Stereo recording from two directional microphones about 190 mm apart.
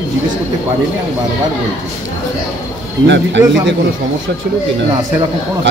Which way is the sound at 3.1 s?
70° right (ahead or behind).